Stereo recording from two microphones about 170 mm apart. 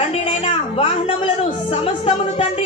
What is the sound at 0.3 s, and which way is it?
Music, 30° left (ahead or behind).